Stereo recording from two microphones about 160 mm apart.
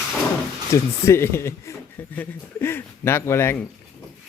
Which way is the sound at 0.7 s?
15° left (ahead or behind).